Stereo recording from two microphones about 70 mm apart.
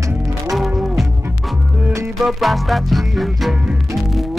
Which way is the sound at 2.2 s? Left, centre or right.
Centre.